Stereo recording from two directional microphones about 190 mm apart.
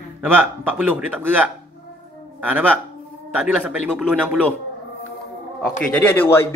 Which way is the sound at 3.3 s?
5° right (ahead or behind).